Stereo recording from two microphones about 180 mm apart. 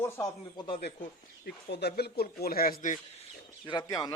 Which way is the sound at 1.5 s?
65° left (ahead or behind).